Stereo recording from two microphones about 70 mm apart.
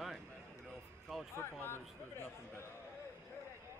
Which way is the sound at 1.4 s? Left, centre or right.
Left.